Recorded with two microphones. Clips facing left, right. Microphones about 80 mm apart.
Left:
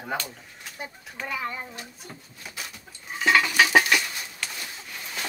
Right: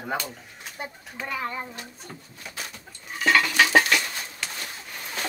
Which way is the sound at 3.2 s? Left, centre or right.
Centre.